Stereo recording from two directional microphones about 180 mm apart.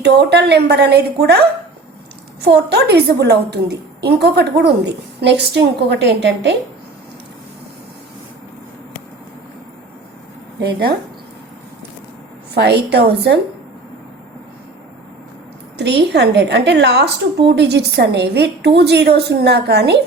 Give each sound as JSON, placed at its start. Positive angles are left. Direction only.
{"t": 0.0, "sound": "a woman's voice", "side_deg": -65}
{"t": 2.4, "sound": "a woman's voice", "side_deg": -65}
{"t": 10.6, "sound": "a woman's voice", "side_deg": -65}
{"t": 12.5, "sound": "a woman's voice", "side_deg": -65}
{"t": 15.8, "sound": "a woman's voice", "side_deg": -70}